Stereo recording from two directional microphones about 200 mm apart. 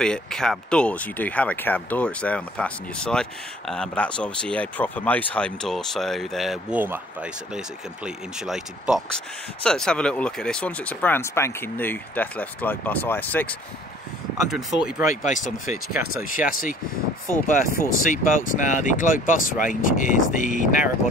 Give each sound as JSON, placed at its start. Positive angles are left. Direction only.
{"t": 0.0, "sound": "speech", "side_deg": 5}
{"t": 14.5, "sound": "speech", "side_deg": -5}
{"t": 15.0, "sound": "speech", "side_deg": 40}